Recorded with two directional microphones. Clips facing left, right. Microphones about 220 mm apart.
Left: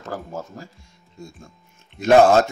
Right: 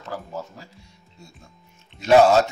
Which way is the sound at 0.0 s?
45° left (ahead or behind).